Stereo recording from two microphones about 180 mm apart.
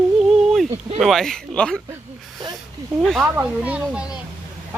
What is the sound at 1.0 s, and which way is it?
Speech, centre (ahead or behind).